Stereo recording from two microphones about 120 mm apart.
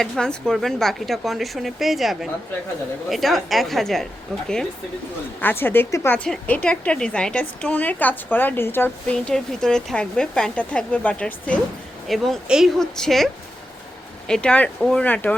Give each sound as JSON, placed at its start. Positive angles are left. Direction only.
{"t": 0.0, "sound": "a woman's voice", "side_deg": 5}
{"t": 5.4, "sound": "a woman's voice", "side_deg": 15}
{"t": 6.2, "sound": "a woman's voice", "side_deg": 10}
{"t": 9.0, "sound": "a woman's voice", "side_deg": 5}